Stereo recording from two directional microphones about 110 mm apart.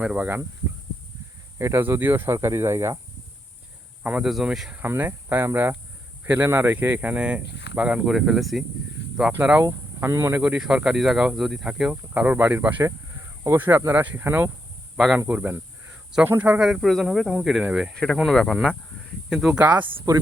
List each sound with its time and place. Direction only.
0.0 s speech: 10° right (ahead or behind)
1.5 s speech: 25° right (ahead or behind)
4.0 s speech: 10° right (ahead or behind)
4.8 s speech: 20° right (ahead or behind); by 8.6 s centre (ahead or behind)
9.3 s speech: 15° right (ahead or behind)
9.6 s speech: 30° right (ahead or behind)
10.4 s speech: 10° right (ahead or behind)
14.9 s speech: 5° right (ahead or behind)
15.9 s cricket: 10° right (ahead or behind)
16.4 s speech: 10° right (ahead or behind)
17.9 s speech: 5° left (ahead or behind)
19.4 s speech: 10° right (ahead or behind)
19.8 s speech: 50° right (ahead or behind)